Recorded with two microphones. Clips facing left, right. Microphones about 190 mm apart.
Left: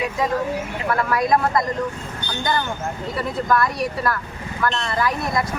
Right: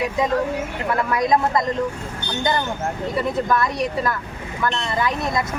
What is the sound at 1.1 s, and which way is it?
Speech, 20° right (ahead or behind).